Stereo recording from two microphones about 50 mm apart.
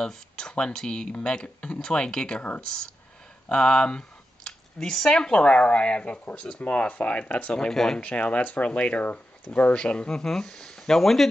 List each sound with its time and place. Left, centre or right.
0.0 s speech: centre
7.5 s speech: centre
8.0 s speech: left; by 11.2 s centre